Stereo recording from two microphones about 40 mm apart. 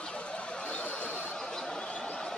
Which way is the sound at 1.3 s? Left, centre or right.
Centre.